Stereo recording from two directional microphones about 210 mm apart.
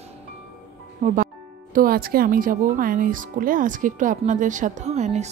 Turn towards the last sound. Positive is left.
turn(degrees=-35)  # may be behind; listen again after turning